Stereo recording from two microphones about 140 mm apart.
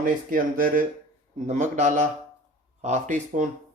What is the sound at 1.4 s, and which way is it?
Speech, 60° right (ahead or behind).